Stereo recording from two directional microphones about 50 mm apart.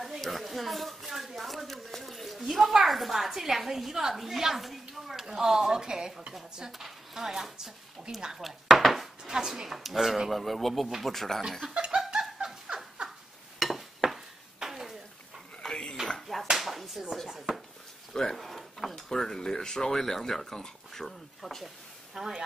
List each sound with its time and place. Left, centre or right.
0.0 s a woman's voice: centre
9.2 s speech: centre
11.7 s laughter: centre
13.6 s stir: centre
15.6 s dishes: centre
16.1 s a sound: centre
18.1 s drawer open or close: centre
18.9 s speech: centre
22.1 s speech: centre